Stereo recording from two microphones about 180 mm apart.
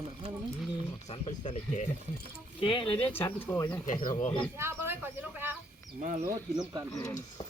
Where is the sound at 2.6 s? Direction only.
25° left (ahead or behind).